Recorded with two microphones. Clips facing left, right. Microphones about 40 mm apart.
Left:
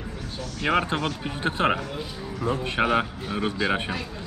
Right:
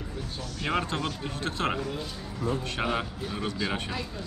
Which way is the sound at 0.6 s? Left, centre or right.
Left.